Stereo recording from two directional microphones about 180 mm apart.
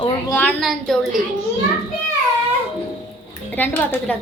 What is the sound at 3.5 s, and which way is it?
Speech, 10° left (ahead or behind).